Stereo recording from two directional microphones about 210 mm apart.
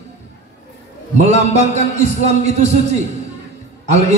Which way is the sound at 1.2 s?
30° right (ahead or behind).